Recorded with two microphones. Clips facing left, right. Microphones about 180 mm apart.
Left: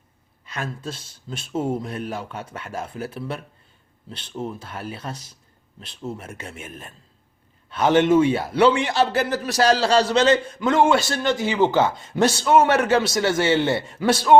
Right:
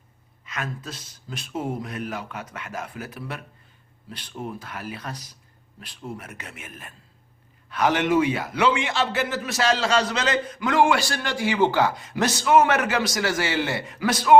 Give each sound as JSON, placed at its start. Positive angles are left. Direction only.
{"t": 0.4, "sound": "a man's voice", "side_deg": 30}